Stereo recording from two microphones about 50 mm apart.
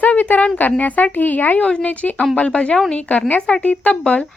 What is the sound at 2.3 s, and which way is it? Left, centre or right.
A woman's voice, centre.